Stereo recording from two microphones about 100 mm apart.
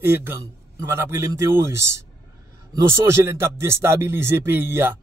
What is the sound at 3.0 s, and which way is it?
Speech, 25° right (ahead or behind).